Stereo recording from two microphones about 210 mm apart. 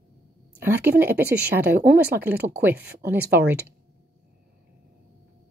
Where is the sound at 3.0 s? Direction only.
10° right (ahead or behind).